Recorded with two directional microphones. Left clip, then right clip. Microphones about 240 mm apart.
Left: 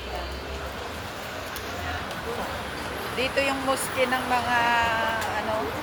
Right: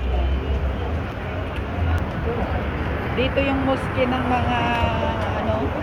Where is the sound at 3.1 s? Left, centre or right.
Centre.